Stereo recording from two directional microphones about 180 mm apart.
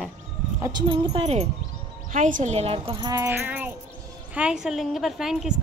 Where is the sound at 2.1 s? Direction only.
45° right (ahead or behind).